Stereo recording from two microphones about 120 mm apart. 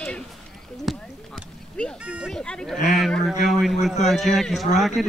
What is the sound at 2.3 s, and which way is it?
Speech, 5° left (ahead or behind).